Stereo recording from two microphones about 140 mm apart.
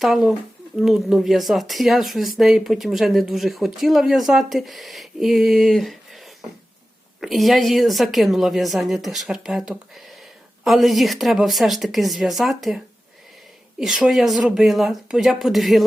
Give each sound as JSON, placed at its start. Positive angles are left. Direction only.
{"t": 0.0, "sound": "speech", "side_deg": 0}